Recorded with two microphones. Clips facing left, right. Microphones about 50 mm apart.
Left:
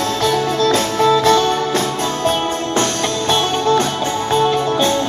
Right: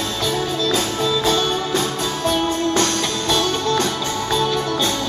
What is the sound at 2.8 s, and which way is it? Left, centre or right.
Music, left.